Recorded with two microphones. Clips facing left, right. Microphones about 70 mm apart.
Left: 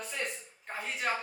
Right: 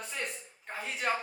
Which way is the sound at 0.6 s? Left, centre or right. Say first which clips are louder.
Even; centre.